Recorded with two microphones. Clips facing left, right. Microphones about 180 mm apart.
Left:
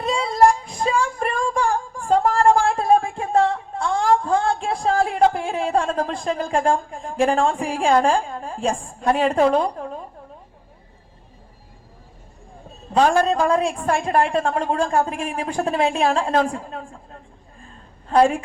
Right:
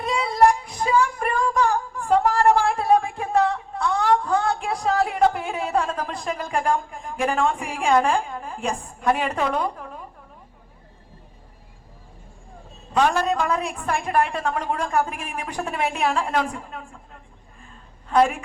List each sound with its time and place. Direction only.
0.0 s child singing: 30° left (ahead or behind)
12.9 s a man's voice: 30° left (ahead or behind)